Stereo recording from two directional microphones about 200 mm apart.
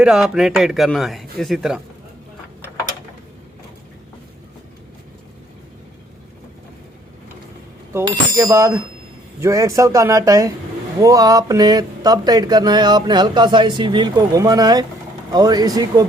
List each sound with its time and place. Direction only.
0.0 s speech: centre (ahead or behind)
8.0 s speech: 20° right (ahead or behind)